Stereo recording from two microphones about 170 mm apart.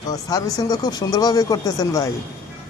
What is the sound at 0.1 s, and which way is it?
Speech, 20° left (ahead or behind).